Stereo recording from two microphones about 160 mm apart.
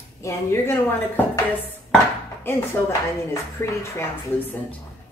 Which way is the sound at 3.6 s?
15° left (ahead or behind).